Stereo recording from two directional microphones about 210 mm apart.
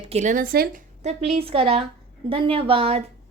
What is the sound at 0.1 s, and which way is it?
Speech, 35° right (ahead or behind).